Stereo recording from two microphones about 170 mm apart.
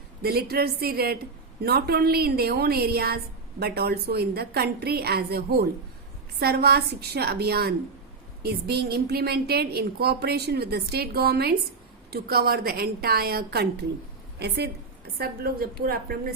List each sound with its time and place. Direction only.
0.2 s a woman's voice: 65° right (ahead or behind)
15.2 s a woman's voice: 60° right (ahead or behind)